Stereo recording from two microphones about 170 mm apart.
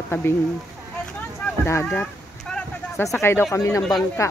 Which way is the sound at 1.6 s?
10° left (ahead or behind).